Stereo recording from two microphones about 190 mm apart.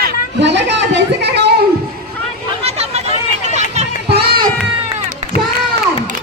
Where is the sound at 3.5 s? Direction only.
35° right (ahead or behind).